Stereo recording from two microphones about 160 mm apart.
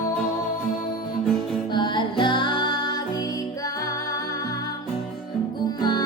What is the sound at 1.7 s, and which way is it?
Music, 30° left (ahead or behind).